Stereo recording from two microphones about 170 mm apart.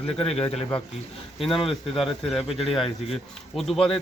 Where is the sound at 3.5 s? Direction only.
Centre (ahead or behind).